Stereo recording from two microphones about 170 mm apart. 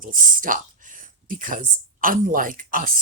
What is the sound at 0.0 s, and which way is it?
Speech, 55° right (ahead or behind).